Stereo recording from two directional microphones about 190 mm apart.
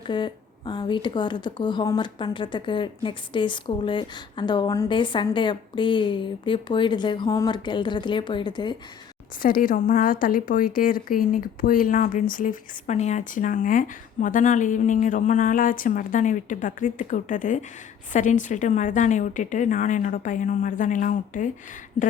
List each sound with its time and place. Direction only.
0.1 s a woman's voice: 25° left (ahead or behind)
9.4 s a woman's voice: 45° left (ahead or behind)